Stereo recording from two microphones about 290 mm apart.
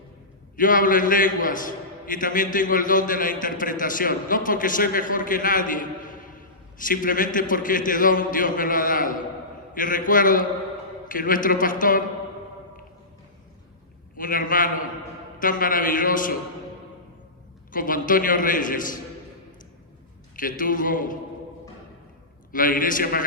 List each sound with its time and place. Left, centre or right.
0.5 s a man's voice: left
14.2 s a man's voice: left
17.7 s a man's voice: left
20.3 s a man's voice: left
22.5 s a man's voice: left